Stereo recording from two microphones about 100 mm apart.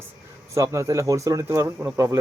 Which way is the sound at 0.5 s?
30° right (ahead or behind).